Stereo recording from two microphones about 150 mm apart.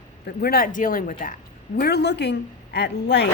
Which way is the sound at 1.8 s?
90° left.